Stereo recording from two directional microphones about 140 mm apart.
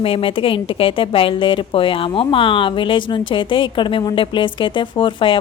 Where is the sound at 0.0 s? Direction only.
40° left (ahead or behind).